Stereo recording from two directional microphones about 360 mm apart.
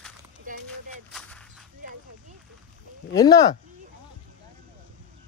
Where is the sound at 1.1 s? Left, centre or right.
Centre.